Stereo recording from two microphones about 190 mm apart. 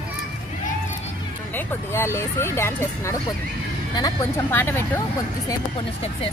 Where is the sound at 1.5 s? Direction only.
10° left (ahead or behind).